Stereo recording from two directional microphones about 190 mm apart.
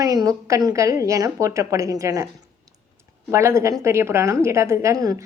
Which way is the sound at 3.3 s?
15° right (ahead or behind).